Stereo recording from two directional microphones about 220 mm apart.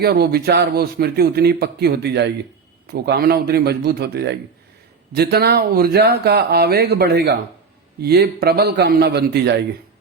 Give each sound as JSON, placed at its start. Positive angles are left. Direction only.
{"t": 0.0, "sound": "a man's voice", "side_deg": -45}